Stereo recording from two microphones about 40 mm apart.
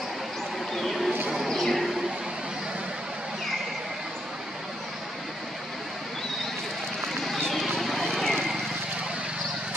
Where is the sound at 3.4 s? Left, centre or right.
Centre.